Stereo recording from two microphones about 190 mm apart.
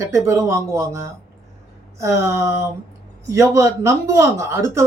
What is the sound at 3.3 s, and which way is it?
Speech, 15° right (ahead or behind).